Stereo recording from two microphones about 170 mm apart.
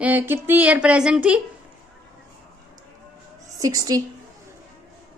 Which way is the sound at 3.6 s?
20° right (ahead or behind).